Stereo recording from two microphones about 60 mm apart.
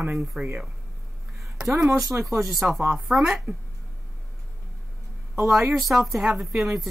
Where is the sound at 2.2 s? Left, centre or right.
Centre.